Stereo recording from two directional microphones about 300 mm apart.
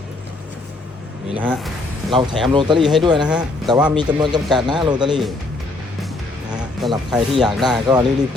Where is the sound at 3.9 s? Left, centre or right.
Centre.